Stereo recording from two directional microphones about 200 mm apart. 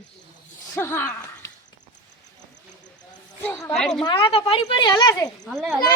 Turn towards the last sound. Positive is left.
turn(degrees=0)  # may be behind; listen again after turning